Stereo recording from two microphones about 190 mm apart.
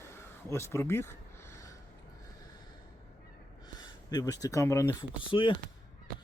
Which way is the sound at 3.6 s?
20° left (ahead or behind).